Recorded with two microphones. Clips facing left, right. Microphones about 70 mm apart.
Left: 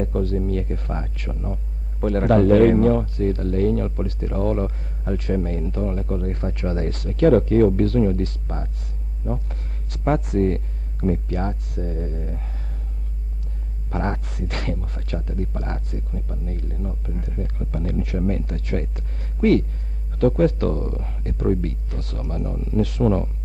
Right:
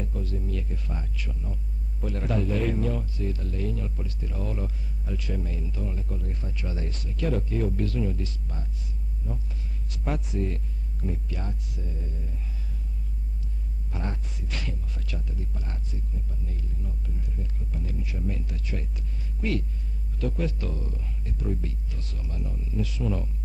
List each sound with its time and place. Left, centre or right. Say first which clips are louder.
0.0 s speech: left 11 dB; left
13.8 s speech: left 10 dB; left